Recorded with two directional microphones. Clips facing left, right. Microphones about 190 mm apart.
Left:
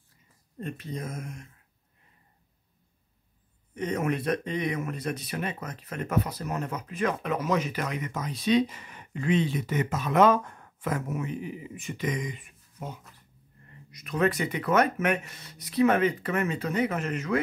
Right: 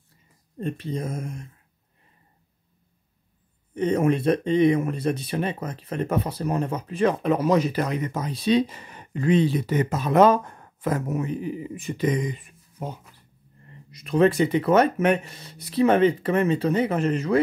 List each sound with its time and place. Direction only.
0.6 s speech: 30° right (ahead or behind)
3.7 s speech: 30° right (ahead or behind)